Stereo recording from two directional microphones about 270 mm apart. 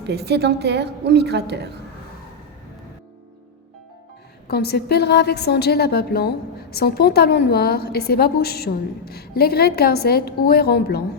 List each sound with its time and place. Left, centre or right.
0.0 s a woman's voice: right
4.4 s a woman's voice: left